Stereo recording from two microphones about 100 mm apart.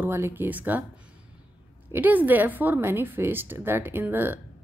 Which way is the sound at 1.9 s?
20° right (ahead or behind).